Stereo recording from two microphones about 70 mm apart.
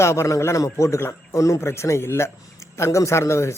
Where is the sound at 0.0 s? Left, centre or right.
Left.